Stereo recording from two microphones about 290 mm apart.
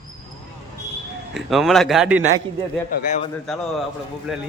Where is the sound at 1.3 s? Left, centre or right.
Centre.